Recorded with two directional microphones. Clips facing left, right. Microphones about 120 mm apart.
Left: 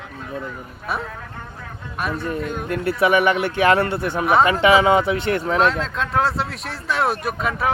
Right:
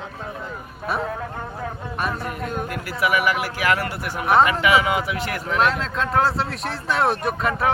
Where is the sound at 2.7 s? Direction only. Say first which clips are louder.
Left 7 dB; 25° left (ahead or behind).